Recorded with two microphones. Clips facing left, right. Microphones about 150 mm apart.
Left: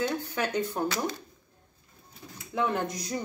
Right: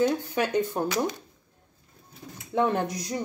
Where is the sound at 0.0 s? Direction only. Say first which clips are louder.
Right 5 dB; 10° right (ahead or behind).